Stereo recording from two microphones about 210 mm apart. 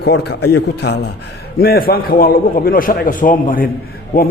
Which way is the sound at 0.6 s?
50° left (ahead or behind).